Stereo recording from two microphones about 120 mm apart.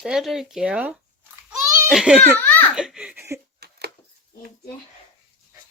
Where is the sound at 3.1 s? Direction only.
20° right (ahead or behind).